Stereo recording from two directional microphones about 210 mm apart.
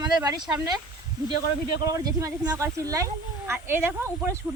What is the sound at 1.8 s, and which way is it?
Speech, 15° right (ahead or behind).